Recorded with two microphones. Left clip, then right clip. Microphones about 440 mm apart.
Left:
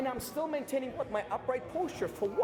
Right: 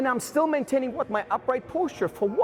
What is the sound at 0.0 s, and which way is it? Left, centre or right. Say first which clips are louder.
Speech: right 11 dB; right.